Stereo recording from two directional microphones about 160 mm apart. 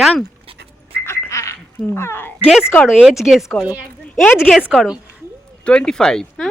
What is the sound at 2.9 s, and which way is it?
Speech, centre (ahead or behind).